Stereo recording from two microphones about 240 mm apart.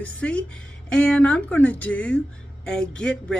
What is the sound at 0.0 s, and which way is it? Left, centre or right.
Speech, centre.